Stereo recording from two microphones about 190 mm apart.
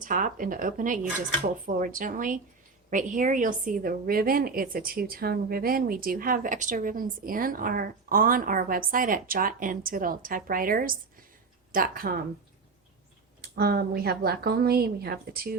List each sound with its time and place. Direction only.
0.0 s a woman's voice: 45° right (ahead or behind)
13.4 s a woman's voice: 55° right (ahead or behind)